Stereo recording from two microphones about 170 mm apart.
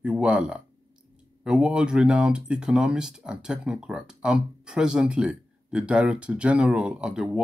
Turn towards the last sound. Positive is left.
turn(degrees=-5)  # may be behind; listen again after turning